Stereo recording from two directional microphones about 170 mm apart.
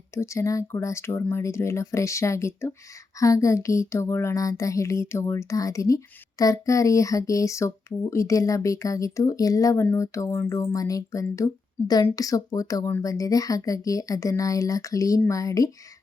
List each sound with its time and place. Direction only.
0.1 s speech: 15° left (ahead or behind)